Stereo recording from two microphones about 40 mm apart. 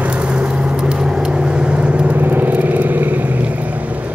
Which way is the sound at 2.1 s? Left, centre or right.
Right.